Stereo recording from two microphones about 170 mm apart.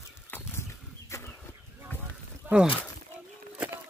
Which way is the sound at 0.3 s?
15° left (ahead or behind).